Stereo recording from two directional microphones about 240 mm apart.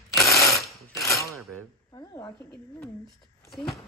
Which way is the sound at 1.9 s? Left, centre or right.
Centre.